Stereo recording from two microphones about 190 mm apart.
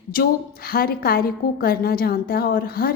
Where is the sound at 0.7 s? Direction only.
50° left (ahead or behind).